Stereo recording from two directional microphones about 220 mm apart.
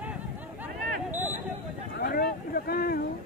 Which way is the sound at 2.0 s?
45° left (ahead or behind).